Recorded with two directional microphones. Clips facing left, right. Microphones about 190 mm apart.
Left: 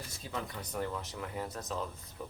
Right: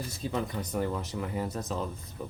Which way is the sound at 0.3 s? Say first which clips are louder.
Right 7 dB; 25° right (ahead or behind).